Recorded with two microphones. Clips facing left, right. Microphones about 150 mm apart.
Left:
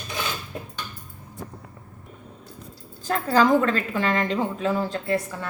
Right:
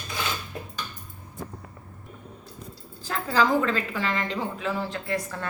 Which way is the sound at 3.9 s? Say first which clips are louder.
Left 5 dB; 45° left (ahead or behind).